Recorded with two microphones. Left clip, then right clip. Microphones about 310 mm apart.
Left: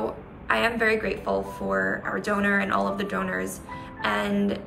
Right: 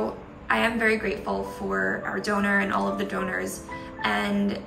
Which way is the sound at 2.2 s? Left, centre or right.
Centre.